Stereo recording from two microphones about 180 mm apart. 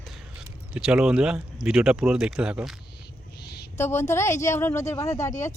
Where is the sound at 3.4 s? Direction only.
65° left (ahead or behind).